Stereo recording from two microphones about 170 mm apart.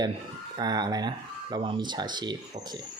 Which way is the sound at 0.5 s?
25° right (ahead or behind).